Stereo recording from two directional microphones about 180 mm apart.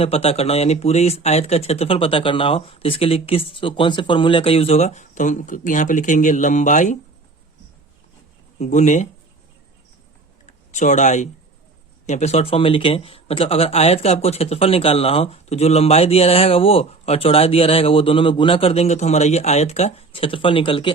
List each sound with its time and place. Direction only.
0.0 s speech: 35° left (ahead or behind)
8.5 s speech: 40° left (ahead or behind)
10.4 s a sound: 40° left (ahead or behind)
12.0 s speech: 40° left (ahead or behind)